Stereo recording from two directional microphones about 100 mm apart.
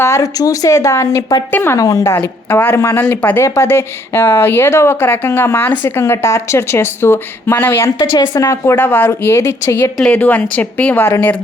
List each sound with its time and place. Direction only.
0.0 s speech: 35° left (ahead or behind)
1.8 s speech: 35° left (ahead or behind)
2.1 s speech: 20° left (ahead or behind)
7.9 s speech: 40° left (ahead or behind)
8.7 s speech: 20° left (ahead or behind)
10.0 s speech: 15° left (ahead or behind)